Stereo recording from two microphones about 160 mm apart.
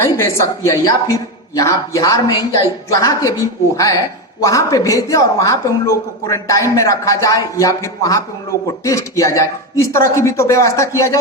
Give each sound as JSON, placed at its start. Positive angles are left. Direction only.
{"t": 0.0, "sound": "a woman's voice", "side_deg": 15}